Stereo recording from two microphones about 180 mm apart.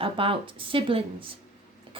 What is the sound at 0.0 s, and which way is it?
Speech, 30° right (ahead or behind).